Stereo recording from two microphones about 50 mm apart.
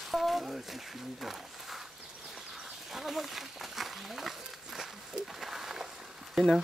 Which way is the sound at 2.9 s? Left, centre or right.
Centre.